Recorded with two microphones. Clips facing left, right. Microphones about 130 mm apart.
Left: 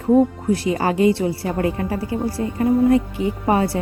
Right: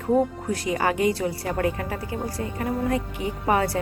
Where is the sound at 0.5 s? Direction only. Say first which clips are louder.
Left 2 dB; 30° left (ahead or behind).